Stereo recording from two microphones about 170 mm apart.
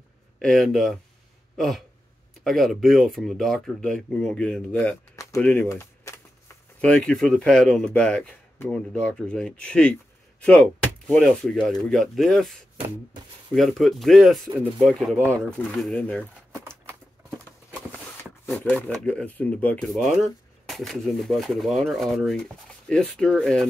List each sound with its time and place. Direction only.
0.4 s speech: centre (ahead or behind)
5.1 s typing: 20° left (ahead or behind)
5.4 s speech: 5° left (ahead or behind)
5.7 s typing: 15° left (ahead or behind)
6.8 s speech: 5° left (ahead or behind)
12.7 s beatboxing: 30° right (ahead or behind)
13.6 s speech: centre (ahead or behind)
17.6 s a sound: 10° left (ahead or behind)
18.9 s speech: 5° left (ahead or behind)